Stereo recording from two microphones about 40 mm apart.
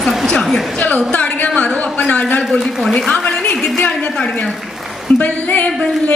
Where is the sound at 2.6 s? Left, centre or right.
Centre.